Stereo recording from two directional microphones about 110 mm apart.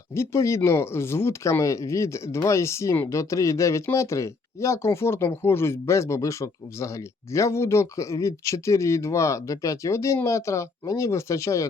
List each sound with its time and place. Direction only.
0.1 s speech: 25° left (ahead or behind)